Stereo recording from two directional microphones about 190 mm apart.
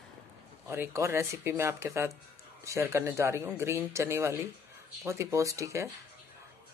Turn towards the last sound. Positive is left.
turn(degrees=-15)  # may be behind; listen again after turning